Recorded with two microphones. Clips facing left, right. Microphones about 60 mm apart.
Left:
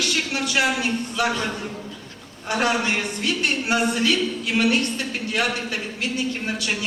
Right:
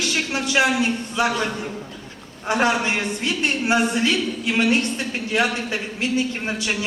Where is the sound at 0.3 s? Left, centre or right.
Right.